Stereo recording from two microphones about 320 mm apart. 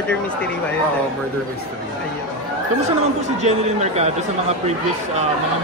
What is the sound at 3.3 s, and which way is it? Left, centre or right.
Speech, right.